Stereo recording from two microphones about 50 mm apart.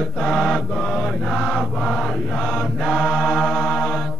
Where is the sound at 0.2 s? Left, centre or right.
Centre.